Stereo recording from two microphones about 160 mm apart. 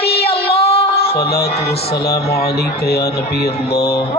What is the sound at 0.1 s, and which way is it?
Child singing, 90° left.